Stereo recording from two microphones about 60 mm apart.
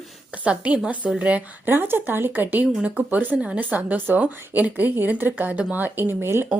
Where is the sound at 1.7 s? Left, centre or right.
Right.